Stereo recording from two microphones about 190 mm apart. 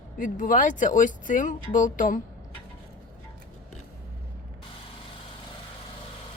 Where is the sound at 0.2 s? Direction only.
45° left (ahead or behind).